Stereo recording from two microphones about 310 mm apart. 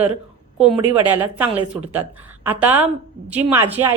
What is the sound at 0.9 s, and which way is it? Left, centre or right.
A woman's voice, centre.